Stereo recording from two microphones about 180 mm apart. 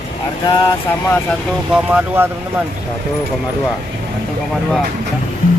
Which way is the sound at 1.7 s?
10° right (ahead or behind).